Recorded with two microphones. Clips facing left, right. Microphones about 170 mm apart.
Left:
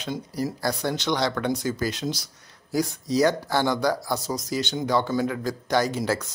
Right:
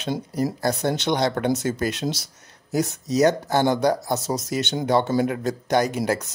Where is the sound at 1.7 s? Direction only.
55° right (ahead or behind).